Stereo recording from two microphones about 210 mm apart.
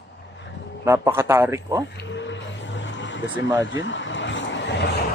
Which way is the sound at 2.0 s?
60° left (ahead or behind).